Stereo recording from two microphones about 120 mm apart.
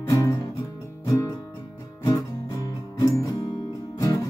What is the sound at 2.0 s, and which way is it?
Music, 30° left (ahead or behind).